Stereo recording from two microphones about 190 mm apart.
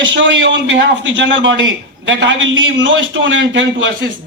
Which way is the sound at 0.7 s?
70° right (ahead or behind).